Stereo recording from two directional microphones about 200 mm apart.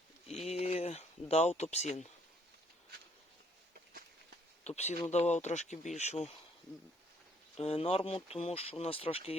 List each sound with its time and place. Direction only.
0.3 s a sound: 30° left (ahead or behind)
4.6 s speech: 35° left (ahead or behind)
7.5 s speech: 30° left (ahead or behind)